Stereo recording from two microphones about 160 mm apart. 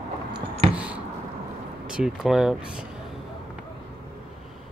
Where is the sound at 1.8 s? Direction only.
5° right (ahead or behind).